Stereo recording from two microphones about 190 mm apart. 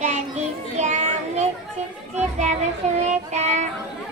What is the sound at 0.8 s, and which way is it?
Children playing, 40° right (ahead or behind).